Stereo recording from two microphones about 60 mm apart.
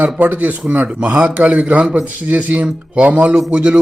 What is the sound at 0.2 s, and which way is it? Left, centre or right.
Speech, right.